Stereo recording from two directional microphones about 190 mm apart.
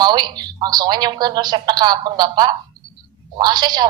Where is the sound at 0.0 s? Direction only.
20° right (ahead or behind).